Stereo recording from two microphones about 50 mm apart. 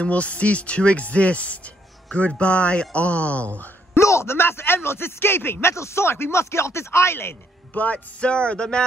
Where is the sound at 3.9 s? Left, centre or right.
Left.